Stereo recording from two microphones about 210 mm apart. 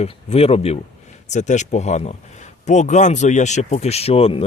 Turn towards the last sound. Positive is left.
turn(degrees=25)  # may be behind; listen again after turning